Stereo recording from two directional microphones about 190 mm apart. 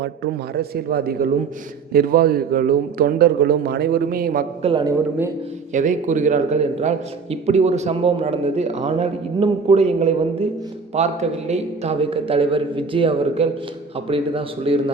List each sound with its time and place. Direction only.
0.5 s a man's voice: 55° right (ahead or behind)
4.6 s a man's voice: 25° right (ahead or behind)
5.7 s a man's voice: 40° right (ahead or behind)